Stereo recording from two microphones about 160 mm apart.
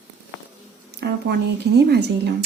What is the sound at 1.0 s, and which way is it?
Speech, 90° right.